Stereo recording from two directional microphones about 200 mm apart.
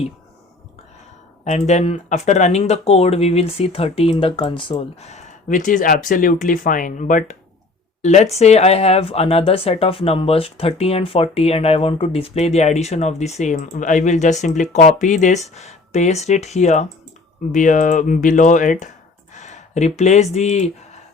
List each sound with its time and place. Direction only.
1.5 s speech: 35° left (ahead or behind)